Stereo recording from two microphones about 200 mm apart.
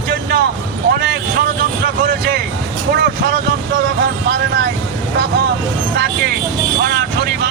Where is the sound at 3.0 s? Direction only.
60° right (ahead or behind).